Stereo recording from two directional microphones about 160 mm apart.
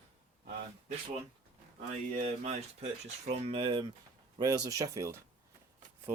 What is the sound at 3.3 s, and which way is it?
Speech, 35° right (ahead or behind).